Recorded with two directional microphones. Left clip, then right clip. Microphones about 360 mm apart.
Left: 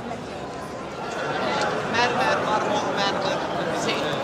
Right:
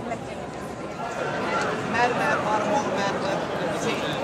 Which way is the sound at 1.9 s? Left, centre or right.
Centre.